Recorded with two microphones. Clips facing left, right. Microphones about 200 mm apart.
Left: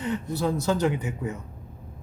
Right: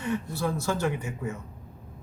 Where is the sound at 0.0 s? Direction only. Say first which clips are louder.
Left 2 dB; 20° left (ahead or behind).